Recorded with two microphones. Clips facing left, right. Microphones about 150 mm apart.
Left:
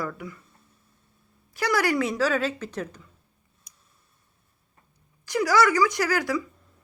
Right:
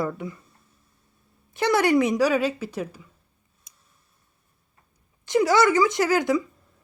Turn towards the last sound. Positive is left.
turn(degrees=-20)  # may be behind; listen again after turning